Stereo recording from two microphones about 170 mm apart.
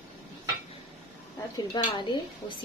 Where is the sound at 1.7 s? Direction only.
25° left (ahead or behind).